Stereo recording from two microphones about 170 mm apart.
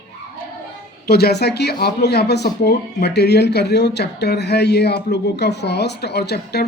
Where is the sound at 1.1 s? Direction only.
70° left (ahead or behind).